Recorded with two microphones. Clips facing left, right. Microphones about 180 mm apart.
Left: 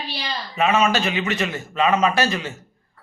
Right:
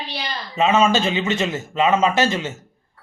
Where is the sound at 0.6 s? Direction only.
25° right (ahead or behind).